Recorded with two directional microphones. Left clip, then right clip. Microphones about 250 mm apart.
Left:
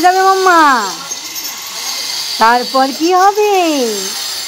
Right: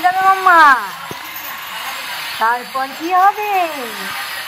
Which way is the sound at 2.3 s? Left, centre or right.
Left.